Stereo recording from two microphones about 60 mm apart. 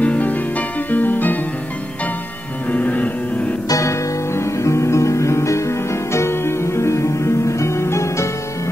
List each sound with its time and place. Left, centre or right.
0.0 s music: left
2.7 s music: left
3.6 s music: left